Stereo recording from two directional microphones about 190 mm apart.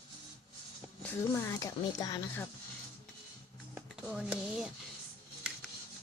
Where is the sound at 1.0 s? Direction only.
10° left (ahead or behind).